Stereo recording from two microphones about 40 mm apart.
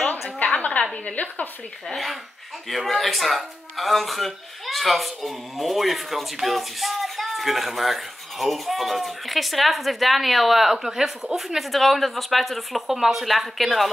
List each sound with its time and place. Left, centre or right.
0.6 s a sound: left
1.0 s a woman's voice: left
2.7 s speech: centre